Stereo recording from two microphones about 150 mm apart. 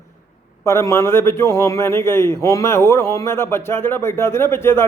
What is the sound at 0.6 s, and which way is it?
A man's voice, 20° left (ahead or behind).